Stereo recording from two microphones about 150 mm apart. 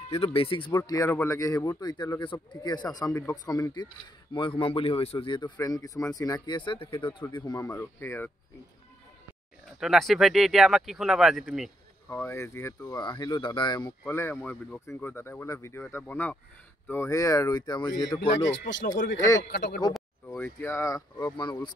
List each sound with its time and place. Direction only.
0.1 s a man's voice: 40° left (ahead or behind); by 3.6 s 25° left (ahead or behind)
4.3 s speech: 35° left (ahead or behind); by 8.3 s 15° left (ahead or behind)
9.7 s speech: centre (ahead or behind)
12.1 s a man's voice: 15° left (ahead or behind)
14.0 s a man's voice: 15° left (ahead or behind)
20.2 s a man's voice: 15° left (ahead or behind)